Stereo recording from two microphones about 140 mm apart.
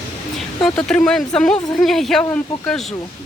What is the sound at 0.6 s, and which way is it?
Speech, 5° left (ahead or behind).